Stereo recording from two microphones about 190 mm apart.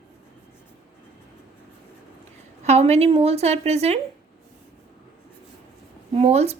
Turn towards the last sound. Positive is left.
turn(degrees=-35)  # may be behind; listen again after turning